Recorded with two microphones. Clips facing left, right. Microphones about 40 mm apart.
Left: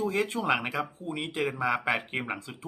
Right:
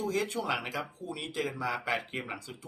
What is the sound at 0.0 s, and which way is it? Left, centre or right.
Speech, left.